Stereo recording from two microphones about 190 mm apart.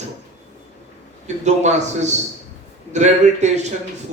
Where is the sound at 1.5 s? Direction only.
40° right (ahead or behind).